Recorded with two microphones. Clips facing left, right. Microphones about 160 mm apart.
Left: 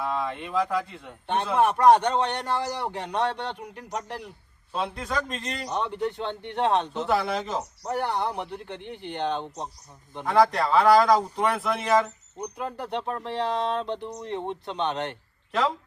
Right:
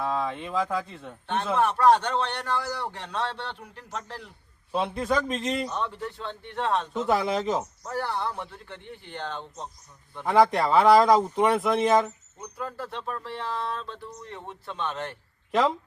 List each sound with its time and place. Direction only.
0.0 s speech: centre (ahead or behind)
1.3 s a man's voice: 15° left (ahead or behind)
4.7 s speech: centre (ahead or behind)
5.7 s speech: 20° left (ahead or behind)
7.1 s speech: centre (ahead or behind)
7.9 s speech: 20° left (ahead or behind)
10.2 s speech: centre (ahead or behind)
12.4 s speech: 20° left (ahead or behind)